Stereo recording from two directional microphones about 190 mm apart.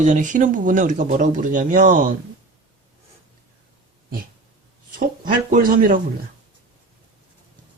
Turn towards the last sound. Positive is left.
turn(degrees=-45)  # may be behind; listen again after turning